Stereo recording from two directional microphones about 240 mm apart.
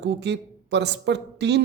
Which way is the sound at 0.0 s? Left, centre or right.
Right.